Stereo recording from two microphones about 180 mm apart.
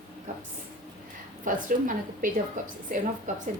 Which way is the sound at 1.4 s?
50° right (ahead or behind).